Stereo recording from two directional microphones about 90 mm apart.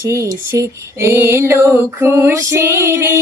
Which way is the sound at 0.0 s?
35° right (ahead or behind).